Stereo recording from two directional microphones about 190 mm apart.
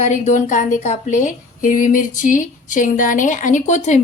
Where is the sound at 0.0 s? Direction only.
40° left (ahead or behind).